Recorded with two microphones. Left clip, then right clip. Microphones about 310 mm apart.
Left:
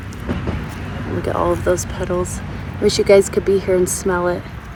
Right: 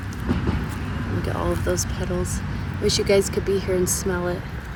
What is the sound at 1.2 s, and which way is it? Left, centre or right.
Speech, centre.